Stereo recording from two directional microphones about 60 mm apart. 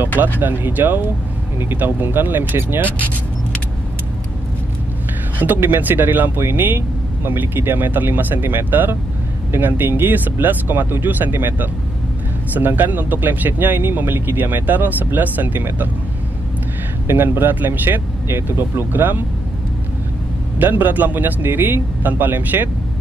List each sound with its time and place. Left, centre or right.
0.4 s speech: right
5.4 s speech: right
17.1 s speech: right
20.5 s speech: right